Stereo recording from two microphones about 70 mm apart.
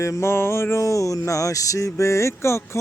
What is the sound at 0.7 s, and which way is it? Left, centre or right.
Mantra, left.